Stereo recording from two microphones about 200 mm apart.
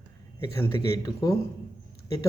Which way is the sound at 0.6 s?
15° left (ahead or behind).